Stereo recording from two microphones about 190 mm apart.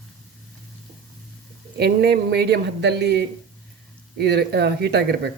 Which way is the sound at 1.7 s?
60° right (ahead or behind).